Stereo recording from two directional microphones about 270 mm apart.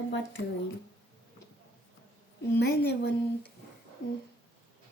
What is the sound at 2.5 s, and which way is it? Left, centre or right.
Speech, left.